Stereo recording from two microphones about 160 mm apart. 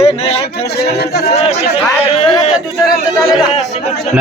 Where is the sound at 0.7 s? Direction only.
90° left.